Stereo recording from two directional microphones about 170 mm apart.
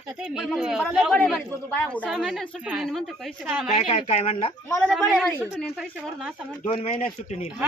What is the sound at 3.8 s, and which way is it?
Speech, 35° left (ahead or behind).